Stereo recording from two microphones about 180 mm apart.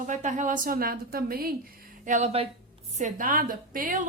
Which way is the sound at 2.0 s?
40° right (ahead or behind).